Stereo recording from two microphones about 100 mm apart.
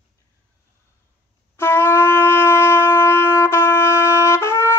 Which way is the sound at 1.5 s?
25° left (ahead or behind).